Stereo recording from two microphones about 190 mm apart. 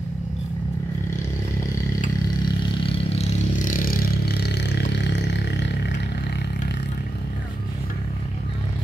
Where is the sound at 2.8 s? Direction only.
30° left (ahead or behind); by 6.7 s 60° left (ahead or behind).